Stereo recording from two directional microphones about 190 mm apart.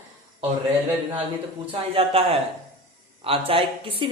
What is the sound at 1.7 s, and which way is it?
Speech, 30° right (ahead or behind).